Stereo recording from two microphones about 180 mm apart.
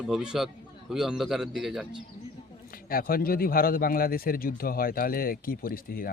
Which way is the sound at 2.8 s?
55° left (ahead or behind).